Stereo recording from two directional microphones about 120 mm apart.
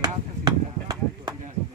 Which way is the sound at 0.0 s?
35° right (ahead or behind).